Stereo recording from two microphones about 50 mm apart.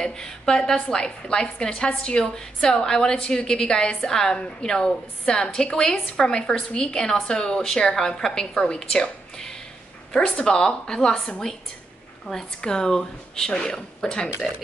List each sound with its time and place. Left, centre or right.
0.0 s a woman's voice: centre
12.6 s a woman's voice: centre